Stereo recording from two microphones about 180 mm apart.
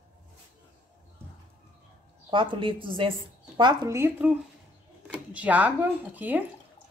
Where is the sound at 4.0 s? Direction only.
10° right (ahead or behind).